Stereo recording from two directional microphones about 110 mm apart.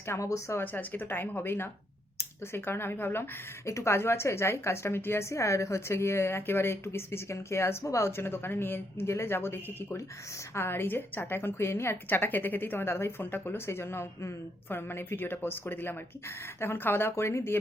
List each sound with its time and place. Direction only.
0.1 s a woman's voice: 30° left (ahead or behind)